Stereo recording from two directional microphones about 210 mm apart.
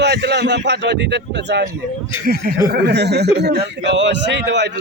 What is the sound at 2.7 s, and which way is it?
A man's voice, 55° right (ahead or behind).